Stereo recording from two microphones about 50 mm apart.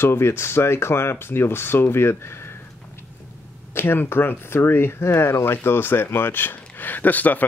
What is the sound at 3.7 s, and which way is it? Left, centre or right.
Speech, left.